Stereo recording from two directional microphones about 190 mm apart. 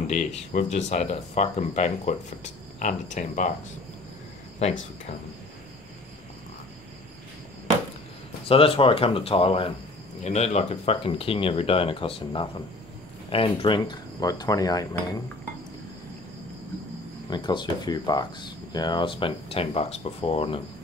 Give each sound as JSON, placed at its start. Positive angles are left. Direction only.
{"t": 0.0, "sound": "speech", "side_deg": 35}
{"t": 4.6, "sound": "speech", "side_deg": 35}
{"t": 8.5, "sound": "speech", "side_deg": 30}
{"t": 17.3, "sound": "speech", "side_deg": 25}